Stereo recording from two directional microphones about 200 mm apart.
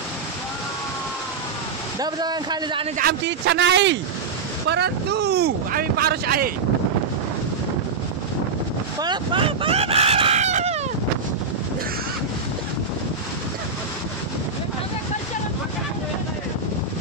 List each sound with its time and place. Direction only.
2.0 s a man's voice: 20° right (ahead or behind)
3.0 s speech: 55° right (ahead or behind)
9.0 s a sound: 25° right (ahead or behind)